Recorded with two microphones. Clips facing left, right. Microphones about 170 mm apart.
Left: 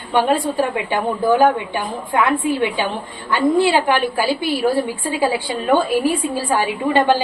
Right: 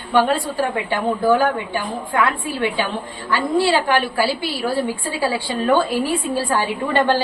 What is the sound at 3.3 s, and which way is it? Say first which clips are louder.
A woman's voice: left 3 dB; 20° left (ahead or behind).